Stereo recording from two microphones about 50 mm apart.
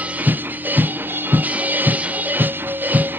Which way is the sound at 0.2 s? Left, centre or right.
Right.